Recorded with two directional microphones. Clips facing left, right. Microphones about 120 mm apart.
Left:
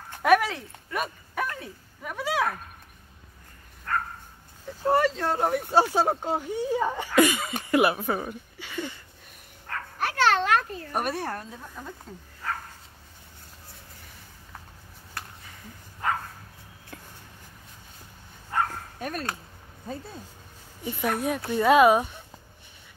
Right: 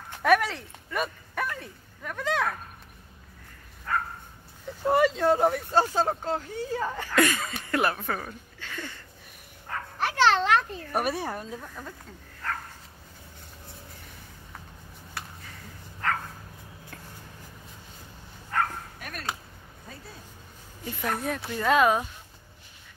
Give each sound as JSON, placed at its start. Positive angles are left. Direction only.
{"t": 0.2, "sound": "speech", "side_deg": 0}
{"t": 3.9, "sound": "dog", "side_deg": -5}
{"t": 4.8, "sound": "speech", "side_deg": -5}
{"t": 5.5, "sound": "speech", "side_deg": 10}
{"t": 9.7, "sound": "dog", "side_deg": -15}
{"t": 10.9, "sound": "speech", "side_deg": -5}
{"t": 16.0, "sound": "dog", "side_deg": 15}
{"t": 18.5, "sound": "bow-wow", "side_deg": 20}
{"t": 18.9, "sound": "dog", "side_deg": 30}
{"t": 21.1, "sound": "speech", "side_deg": 0}
{"t": 21.5, "sound": "speech", "side_deg": 15}